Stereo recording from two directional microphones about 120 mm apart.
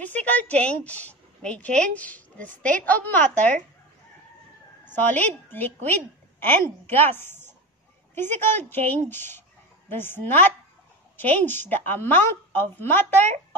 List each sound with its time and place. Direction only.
0.0 s a woman's voice: 15° left (ahead or behind)
4.9 s a woman's voice: 15° left (ahead or behind)